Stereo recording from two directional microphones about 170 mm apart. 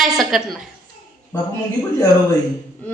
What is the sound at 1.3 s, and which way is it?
Speech, 15° left (ahead or behind).